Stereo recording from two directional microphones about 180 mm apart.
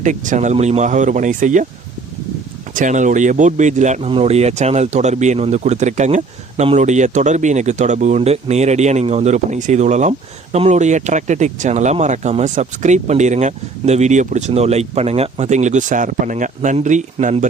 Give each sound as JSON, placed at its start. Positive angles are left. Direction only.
{"t": 0.0, "sound": "speech", "side_deg": -45}
{"t": 2.7, "sound": "speech", "side_deg": -45}